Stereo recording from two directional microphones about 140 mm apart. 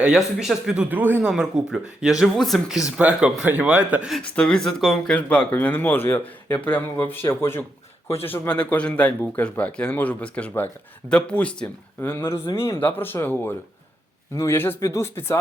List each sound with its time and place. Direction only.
0.0 s a man's voice: 5° right (ahead or behind)
4.2 s speech: 5° left (ahead or behind)